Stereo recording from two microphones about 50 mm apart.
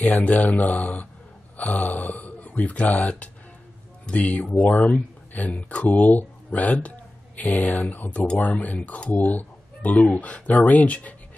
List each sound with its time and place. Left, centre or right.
0.0 s speech: left